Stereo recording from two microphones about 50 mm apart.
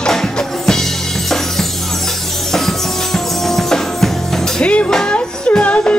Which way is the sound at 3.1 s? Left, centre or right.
Centre.